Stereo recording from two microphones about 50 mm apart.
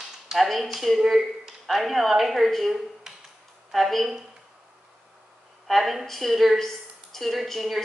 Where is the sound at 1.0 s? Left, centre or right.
Centre.